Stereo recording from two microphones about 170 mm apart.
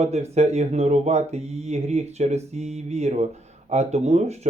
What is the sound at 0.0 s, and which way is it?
Speech, 40° right (ahead or behind).